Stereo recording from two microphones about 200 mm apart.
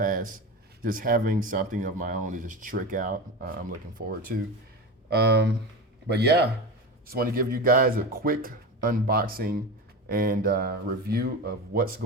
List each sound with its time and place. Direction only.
0.0 s speech: 45° right (ahead or behind)
5.0 s speech: 55° right (ahead or behind)